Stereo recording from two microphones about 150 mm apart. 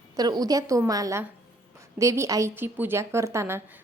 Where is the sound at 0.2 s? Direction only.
25° right (ahead or behind).